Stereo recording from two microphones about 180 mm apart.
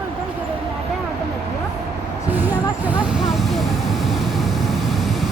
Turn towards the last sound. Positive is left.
turn(degrees=0)  # may be behind; listen again after turning